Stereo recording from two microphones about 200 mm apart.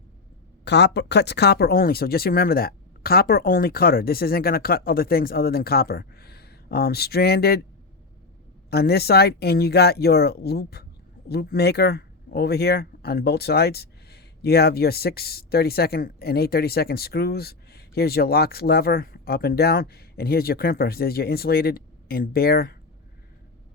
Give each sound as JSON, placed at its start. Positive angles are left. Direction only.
{"t": 0.6, "sound": "speech", "side_deg": 60}
{"t": 8.7, "sound": "speech", "side_deg": 55}